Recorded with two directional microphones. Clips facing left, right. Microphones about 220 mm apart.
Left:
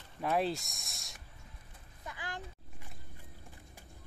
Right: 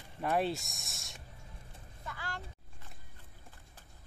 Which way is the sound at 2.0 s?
15° left (ahead or behind).